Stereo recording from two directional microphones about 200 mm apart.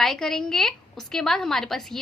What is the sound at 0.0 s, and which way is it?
A woman's voice, centre (ahead or behind).